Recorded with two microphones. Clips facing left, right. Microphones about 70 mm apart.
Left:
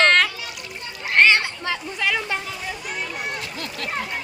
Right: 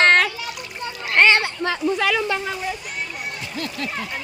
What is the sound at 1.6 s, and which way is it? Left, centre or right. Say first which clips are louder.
Speech: right 5 dB; right.